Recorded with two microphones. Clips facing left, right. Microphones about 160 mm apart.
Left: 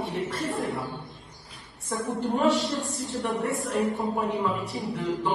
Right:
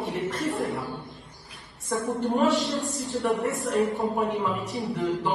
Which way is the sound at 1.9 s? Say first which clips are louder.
Right 2 dB; centre (ahead or behind).